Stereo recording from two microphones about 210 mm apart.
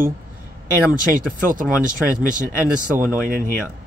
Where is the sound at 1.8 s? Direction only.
40° right (ahead or behind).